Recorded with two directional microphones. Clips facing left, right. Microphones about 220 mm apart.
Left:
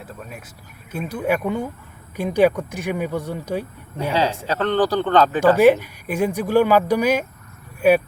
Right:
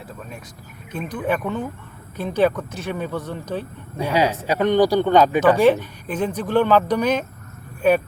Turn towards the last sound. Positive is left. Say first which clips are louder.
# left 2 dB
turn(degrees=10)  # may be behind; listen again after turning